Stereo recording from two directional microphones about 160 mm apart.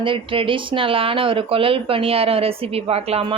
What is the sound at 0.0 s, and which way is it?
A woman's voice, 35° right (ahead or behind).